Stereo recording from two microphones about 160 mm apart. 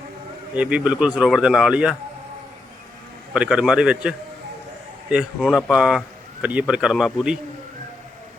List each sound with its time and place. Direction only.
0.5 s a man's voice: 5° right (ahead or behind)
3.3 s a man's voice: 5° right (ahead or behind)
5.1 s a man's voice: centre (ahead or behind)